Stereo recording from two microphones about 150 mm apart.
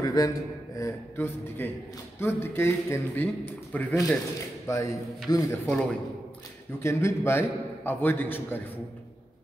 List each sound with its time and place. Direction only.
0.0 s a man's voice: 25° left (ahead or behind)
5.7 s a man's voice: 5° left (ahead or behind)
6.8 s a man's voice: 20° left (ahead or behind)